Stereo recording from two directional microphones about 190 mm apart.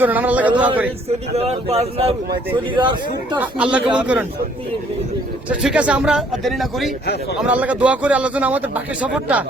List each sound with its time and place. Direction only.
0.0 s speech: 10° right (ahead or behind)
1.4 s speech: 35° right (ahead or behind)
3.3 s speech: 10° right (ahead or behind)
5.5 s speech: 5° right (ahead or behind)